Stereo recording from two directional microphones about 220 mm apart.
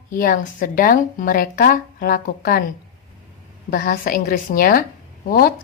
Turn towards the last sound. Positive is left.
turn(degrees=40)  # may be behind; listen again after turning